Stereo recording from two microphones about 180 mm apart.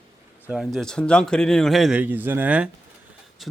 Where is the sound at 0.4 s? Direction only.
5° right (ahead or behind).